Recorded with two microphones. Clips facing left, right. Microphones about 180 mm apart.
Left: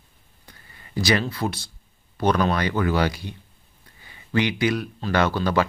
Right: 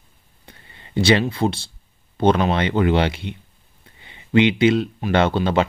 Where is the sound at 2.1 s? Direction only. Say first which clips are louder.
Right 4 dB; 25° right (ahead or behind).